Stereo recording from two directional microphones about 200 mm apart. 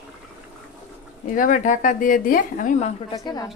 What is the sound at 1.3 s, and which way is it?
Speech, 40° left (ahead or behind).